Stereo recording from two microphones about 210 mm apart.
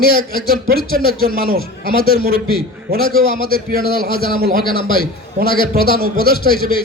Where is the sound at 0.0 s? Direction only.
45° right (ahead or behind).